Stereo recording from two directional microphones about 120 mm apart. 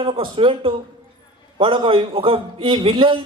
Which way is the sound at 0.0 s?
50° right (ahead or behind).